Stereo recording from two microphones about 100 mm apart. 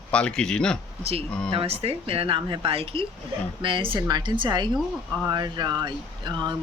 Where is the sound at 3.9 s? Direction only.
40° right (ahead or behind).